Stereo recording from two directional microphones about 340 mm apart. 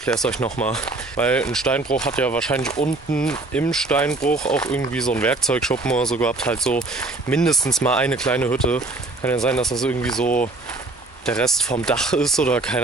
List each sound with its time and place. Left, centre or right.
0.0 s speech: centre
10.2 s speech: left
11.2 s speech: centre